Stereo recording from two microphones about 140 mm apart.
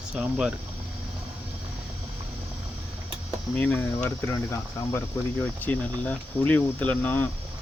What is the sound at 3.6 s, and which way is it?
Speech, 10° left (ahead or behind).